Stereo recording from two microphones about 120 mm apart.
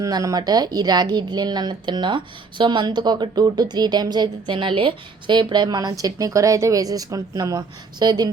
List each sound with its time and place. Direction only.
0.0 s a woman's voice: 30° right (ahead or behind)